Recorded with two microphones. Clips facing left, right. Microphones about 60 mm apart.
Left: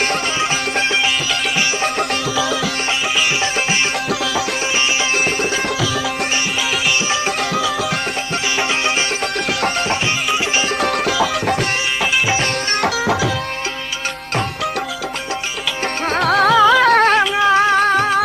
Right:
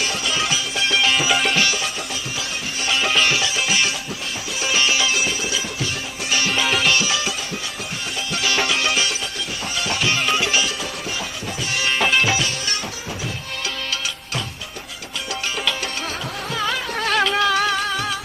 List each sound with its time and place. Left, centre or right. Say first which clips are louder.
0.0 s music: left 5 dB; left
5.1 s music: left 5 dB; left
9.5 s music: left 10 dB; left
10.8 s music: left 11 dB; left
12.8 s music: left 13 dB; left
16.2 s music: left 16 dB; left
17.2 s music: left 5 dB; left
17.7 s music: left 9 dB; left